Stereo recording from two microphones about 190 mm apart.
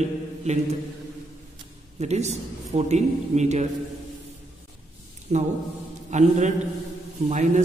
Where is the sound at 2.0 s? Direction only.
35° right (ahead or behind).